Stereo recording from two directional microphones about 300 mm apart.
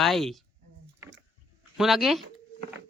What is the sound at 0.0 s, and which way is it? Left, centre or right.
Speech, centre.